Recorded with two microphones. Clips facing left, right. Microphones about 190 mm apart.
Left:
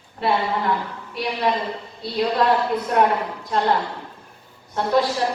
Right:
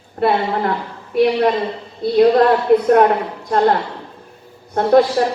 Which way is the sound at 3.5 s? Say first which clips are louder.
Right 6 dB; 50° right (ahead or behind).